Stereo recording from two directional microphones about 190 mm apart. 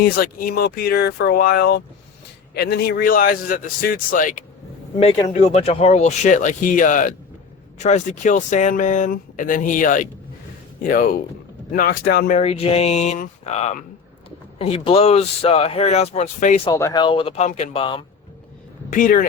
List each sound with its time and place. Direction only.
0.0 s a man's voice: 50° left (ahead or behind)
4.9 s a man's voice: 30° left (ahead or behind); by 12.4 s 50° left (ahead or behind)
12.4 s speech: 30° left (ahead or behind)
16.7 s speech: 20° left (ahead or behind)
18.9 s a man's voice: 45° left (ahead or behind)